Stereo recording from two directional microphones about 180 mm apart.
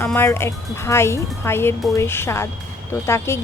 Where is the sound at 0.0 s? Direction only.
10° left (ahead or behind).